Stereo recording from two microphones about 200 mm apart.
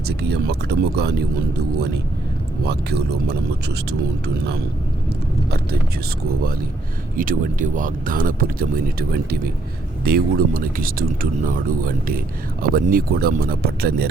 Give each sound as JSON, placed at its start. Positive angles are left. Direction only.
{"t": 0.1, "sound": "speech", "side_deg": -55}
{"t": 2.6, "sound": "speech", "side_deg": -55}
{"t": 7.2, "sound": "speech", "side_deg": -40}